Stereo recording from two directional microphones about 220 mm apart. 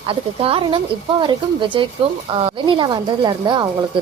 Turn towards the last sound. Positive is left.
turn(degrees=-20)  # may be behind; listen again after turning